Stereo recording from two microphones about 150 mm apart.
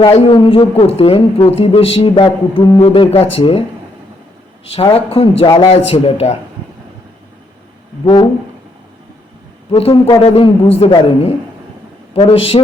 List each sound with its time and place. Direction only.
0.1 s a man's voice: 45° left (ahead or behind)
0.3 s a woman's voice: 35° left (ahead or behind)
4.7 s a woman's voice: 40° left (ahead or behind)
9.7 s a woman's voice: 40° left (ahead or behind)